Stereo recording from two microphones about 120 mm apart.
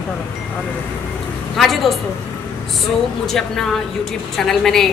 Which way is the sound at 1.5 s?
Centre (ahead or behind).